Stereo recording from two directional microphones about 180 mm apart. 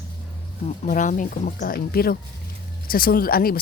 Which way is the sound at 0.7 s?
45° left (ahead or behind).